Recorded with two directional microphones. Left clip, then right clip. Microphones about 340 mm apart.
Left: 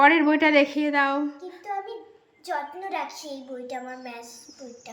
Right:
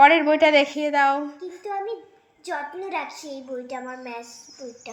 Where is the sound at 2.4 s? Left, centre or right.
Left.